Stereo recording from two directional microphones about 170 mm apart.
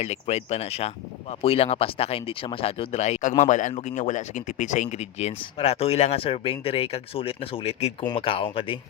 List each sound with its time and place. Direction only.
0.0 s speech: 40° left (ahead or behind)